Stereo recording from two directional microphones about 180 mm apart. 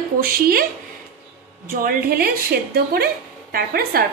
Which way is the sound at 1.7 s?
55° right (ahead or behind).